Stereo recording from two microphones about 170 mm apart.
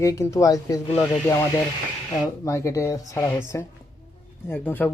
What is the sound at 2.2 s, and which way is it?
Speech, 15° left (ahead or behind).